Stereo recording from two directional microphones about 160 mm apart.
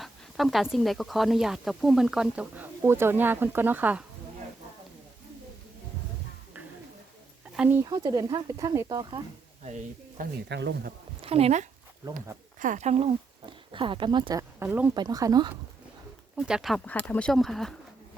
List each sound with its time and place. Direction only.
0.0 s speech: centre (ahead or behind)
7.5 s speech: 10° right (ahead or behind)
7.9 s speech: 25° right (ahead or behind)
9.6 s speech: 45° right (ahead or behind)
10.5 s speech: 90° right
11.2 s speech: 40° right (ahead or behind)
12.5 s speech: 55° right (ahead or behind); by 14.4 s 30° right (ahead or behind)
14.6 s speech: 10° right (ahead or behind)
14.9 s speech: 25° right (ahead or behind)
16.3 s speech: 5° right (ahead or behind)